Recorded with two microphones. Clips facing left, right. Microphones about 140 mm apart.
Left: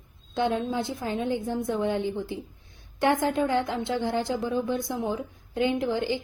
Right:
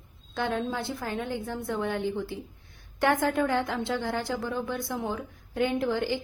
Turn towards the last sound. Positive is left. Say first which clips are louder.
# left 1 dB
turn(degrees=20)  # may be behind; listen again after turning